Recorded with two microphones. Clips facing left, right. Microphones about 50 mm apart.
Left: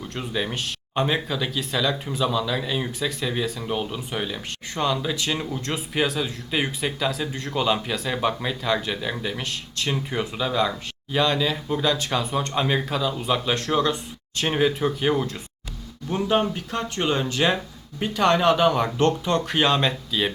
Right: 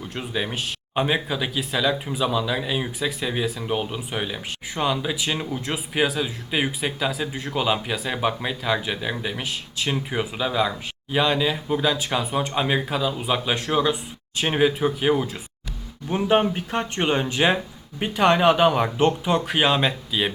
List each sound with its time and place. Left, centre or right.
0.0 s speech: centre
16.0 s speech: right